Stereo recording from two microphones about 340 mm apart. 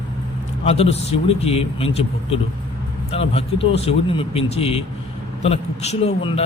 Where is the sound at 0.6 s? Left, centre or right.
Centre.